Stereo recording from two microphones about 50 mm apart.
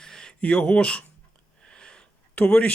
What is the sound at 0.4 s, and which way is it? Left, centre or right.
Speech, centre.